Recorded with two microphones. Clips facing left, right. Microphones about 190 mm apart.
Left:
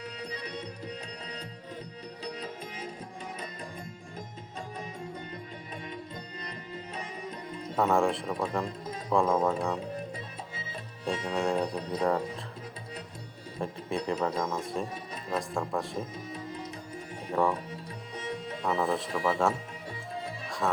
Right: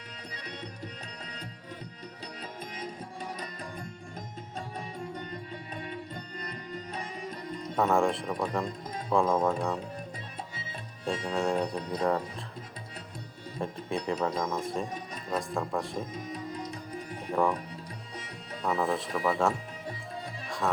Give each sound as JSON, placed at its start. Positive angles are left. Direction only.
{"t": 7.8, "sound": "speech", "side_deg": 0}
{"t": 11.0, "sound": "speech", "side_deg": 0}
{"t": 13.6, "sound": "speech", "side_deg": 0}
{"t": 18.6, "sound": "speech", "side_deg": 0}